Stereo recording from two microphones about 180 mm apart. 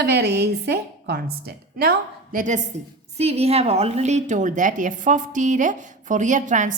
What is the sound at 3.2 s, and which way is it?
A woman's voice, 35° right (ahead or behind).